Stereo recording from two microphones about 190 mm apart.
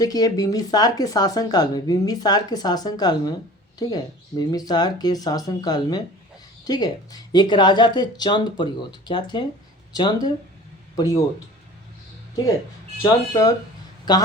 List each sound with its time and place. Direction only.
0.0 s speech: 20° left (ahead or behind)
13.0 s speech: 20° left (ahead or behind)